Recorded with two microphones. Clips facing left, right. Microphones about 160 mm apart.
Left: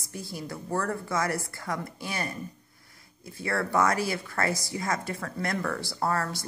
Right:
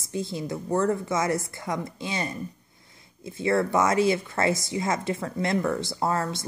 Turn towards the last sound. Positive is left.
turn(degrees=-20)  # may be behind; listen again after turning